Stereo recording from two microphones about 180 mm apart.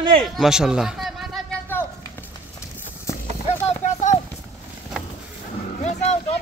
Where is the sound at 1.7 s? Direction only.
10° left (ahead or behind).